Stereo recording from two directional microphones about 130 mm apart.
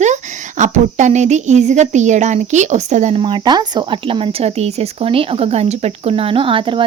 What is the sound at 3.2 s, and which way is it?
Speech, 40° right (ahead or behind).